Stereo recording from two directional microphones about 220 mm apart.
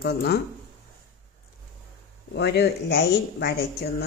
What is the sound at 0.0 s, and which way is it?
Speech, 45° left (ahead or behind).